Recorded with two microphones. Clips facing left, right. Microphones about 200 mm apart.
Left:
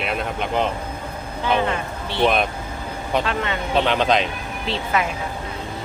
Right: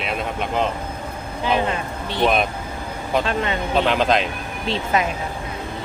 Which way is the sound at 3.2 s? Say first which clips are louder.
Right 2 dB; 30° right (ahead or behind).